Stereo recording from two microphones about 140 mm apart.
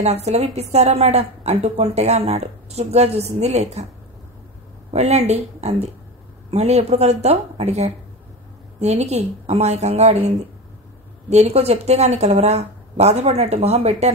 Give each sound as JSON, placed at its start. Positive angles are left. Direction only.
{"t": 0.0, "sound": "a woman's voice", "side_deg": -50}
{"t": 4.9, "sound": "a woman's voice", "side_deg": -50}
{"t": 11.2, "sound": "a woman's voice", "side_deg": -50}